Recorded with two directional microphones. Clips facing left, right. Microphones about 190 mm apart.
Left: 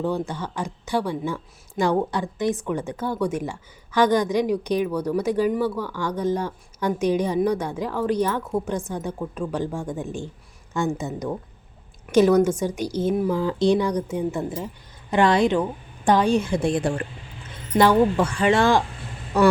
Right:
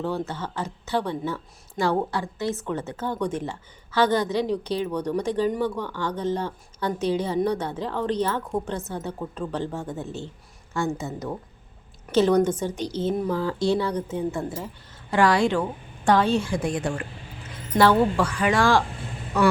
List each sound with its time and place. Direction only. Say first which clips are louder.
0.0 s speech: left 2 dB; 15° left (ahead or behind)
16.6 s speech: left 4 dB; 35° left (ahead or behind)
17.7 s speech: left 2 dB; 20° left (ahead or behind)